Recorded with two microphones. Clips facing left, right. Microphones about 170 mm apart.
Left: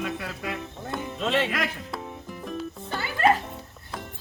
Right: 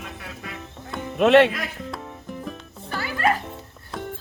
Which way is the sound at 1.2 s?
70° right (ahead or behind).